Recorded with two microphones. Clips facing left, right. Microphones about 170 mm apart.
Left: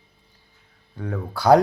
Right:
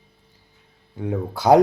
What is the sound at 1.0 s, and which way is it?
Speech, 25° right (ahead or behind).